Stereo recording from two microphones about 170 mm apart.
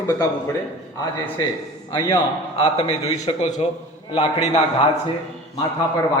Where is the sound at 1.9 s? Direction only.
20° left (ahead or behind).